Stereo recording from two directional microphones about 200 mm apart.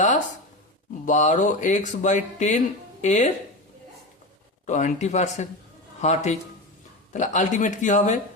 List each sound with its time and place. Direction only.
1.0 s speech: 35° left (ahead or behind)
4.6 s speech: 35° left (ahead or behind)